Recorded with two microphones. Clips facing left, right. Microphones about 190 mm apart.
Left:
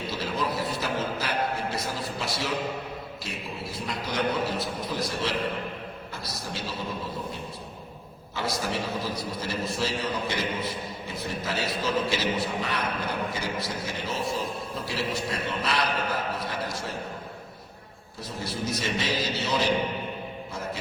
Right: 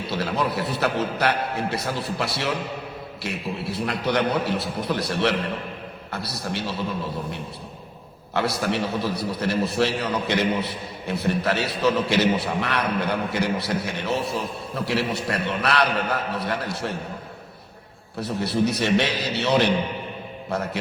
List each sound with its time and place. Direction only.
0.1 s a man's voice: 70° right (ahead or behind)
8.3 s a man's voice: 65° right (ahead or behind)
18.2 s a man's voice: 65° right (ahead or behind)